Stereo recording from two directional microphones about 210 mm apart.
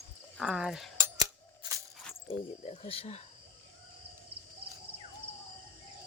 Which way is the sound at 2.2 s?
30° left (ahead or behind).